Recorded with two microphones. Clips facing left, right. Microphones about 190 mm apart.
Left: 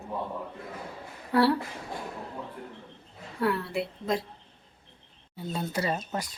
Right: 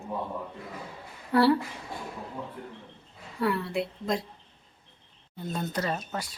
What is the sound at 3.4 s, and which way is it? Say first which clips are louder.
Speech: even; centre (ahead or behind).